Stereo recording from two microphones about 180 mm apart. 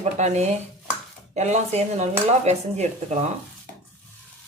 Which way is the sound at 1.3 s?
40° right (ahead or behind).